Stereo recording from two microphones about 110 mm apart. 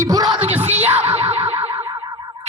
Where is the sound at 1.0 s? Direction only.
65° right (ahead or behind).